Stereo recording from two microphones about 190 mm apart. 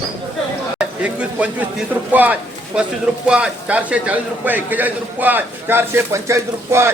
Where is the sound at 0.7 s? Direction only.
5° right (ahead or behind).